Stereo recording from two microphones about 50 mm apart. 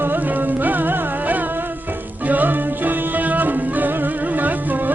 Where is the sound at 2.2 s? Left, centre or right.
Right.